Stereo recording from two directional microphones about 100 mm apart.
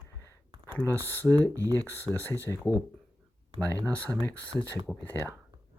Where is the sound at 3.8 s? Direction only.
15° left (ahead or behind).